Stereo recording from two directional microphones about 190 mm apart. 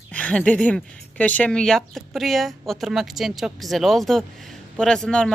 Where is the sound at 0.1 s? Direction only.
5° left (ahead or behind).